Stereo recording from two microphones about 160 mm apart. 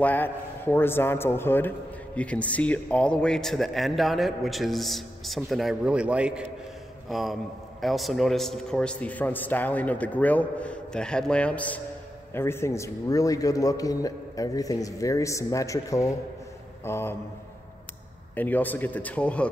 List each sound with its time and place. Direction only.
0.0 s a man's voice: 10° left (ahead or behind)
18.3 s a man's voice: 10° left (ahead or behind)